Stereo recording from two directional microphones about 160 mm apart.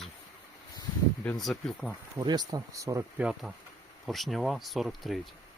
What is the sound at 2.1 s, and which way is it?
Speech, 25° right (ahead or behind).